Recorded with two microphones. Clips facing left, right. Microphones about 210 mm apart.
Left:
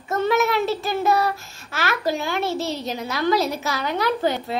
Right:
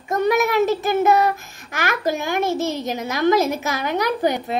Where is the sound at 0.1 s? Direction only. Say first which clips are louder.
Right 2 dB; 15° right (ahead or behind).